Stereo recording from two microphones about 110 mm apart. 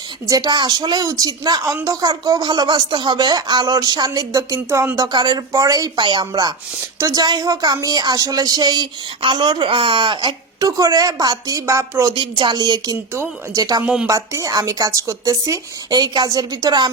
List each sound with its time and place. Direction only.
0.3 s a woman's voice: 35° right (ahead or behind)
5.1 s a woman's voice: 40° right (ahead or behind); by 12.1 s 25° right (ahead or behind)
12.1 s a woman's voice: 45° right (ahead or behind)
13.8 s speech: 10° right (ahead or behind)
14.1 s a woman's voice: 30° right (ahead or behind)